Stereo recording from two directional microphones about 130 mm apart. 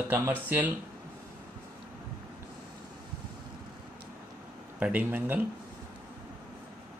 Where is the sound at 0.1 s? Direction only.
15° right (ahead or behind).